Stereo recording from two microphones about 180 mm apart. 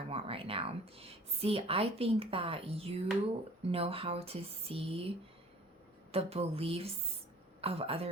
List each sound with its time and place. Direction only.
0.1 s speech: 30° right (ahead or behind)
6.1 s speech: 35° right (ahead or behind)